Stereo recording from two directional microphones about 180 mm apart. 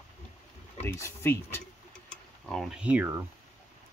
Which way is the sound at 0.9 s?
15° left (ahead or behind).